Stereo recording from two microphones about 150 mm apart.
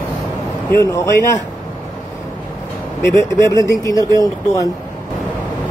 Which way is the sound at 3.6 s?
20° left (ahead or behind).